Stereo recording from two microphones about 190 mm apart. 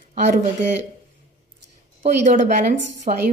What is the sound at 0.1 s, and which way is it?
Speech, 40° right (ahead or behind).